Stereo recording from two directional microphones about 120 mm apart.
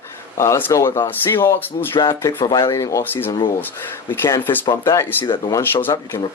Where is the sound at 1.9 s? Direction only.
35° left (ahead or behind).